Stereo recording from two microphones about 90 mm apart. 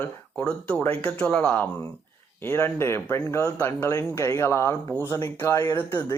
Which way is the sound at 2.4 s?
25° left (ahead or behind).